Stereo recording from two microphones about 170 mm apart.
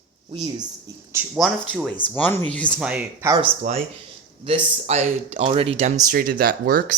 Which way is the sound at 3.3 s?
35° right (ahead or behind).